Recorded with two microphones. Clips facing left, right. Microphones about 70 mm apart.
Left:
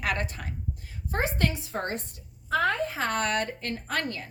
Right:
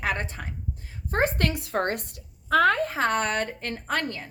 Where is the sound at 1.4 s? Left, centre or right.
Right.